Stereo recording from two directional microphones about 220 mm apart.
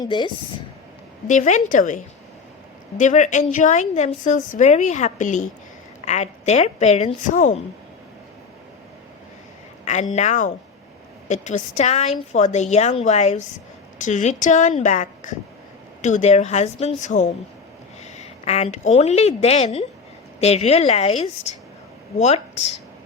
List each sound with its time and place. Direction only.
0.0 s speech: 20° left (ahead or behind)
1.3 s a woman's voice: 35° left (ahead or behind)
9.8 s a woman's voice: 35° left (ahead or behind)